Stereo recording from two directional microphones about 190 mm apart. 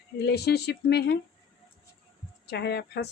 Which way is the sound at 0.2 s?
60° left (ahead or behind).